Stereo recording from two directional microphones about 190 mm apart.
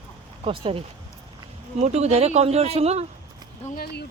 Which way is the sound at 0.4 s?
30° right (ahead or behind).